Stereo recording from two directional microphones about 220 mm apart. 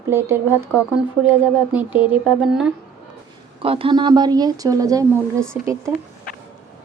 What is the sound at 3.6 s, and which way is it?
A woman's voice, 25° right (ahead or behind).